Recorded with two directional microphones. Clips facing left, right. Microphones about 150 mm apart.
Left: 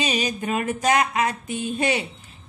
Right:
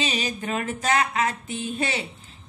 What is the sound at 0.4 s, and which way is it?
A man's voice, 15° left (ahead or behind).